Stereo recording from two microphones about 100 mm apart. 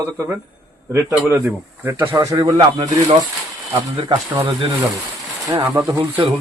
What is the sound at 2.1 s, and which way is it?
Speech, 35° right (ahead or behind).